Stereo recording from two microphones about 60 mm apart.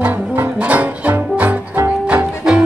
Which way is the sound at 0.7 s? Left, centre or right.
Right.